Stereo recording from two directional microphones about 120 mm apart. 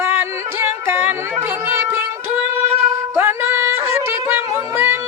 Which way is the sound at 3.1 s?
20° right (ahead or behind).